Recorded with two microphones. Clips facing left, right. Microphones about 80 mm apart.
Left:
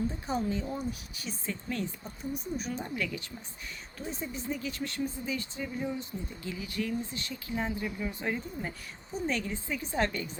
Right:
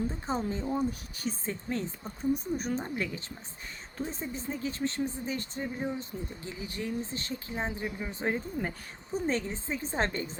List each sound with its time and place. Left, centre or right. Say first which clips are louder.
0.1 s speech: even; right
2.3 s speech: right 4 dB; right